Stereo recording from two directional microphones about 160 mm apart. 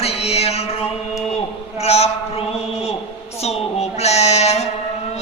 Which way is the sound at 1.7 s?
40° left (ahead or behind).